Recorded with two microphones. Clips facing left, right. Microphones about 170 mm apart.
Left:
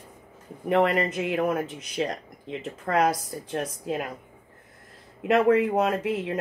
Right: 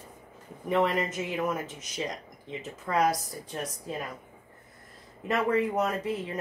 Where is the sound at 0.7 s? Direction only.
65° left (ahead or behind); by 4.0 s 80° left.